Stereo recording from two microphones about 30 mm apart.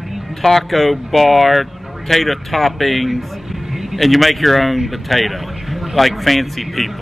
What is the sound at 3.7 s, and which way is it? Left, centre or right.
Vehicle, centre.